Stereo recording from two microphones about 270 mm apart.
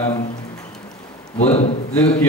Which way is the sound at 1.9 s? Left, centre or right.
Centre.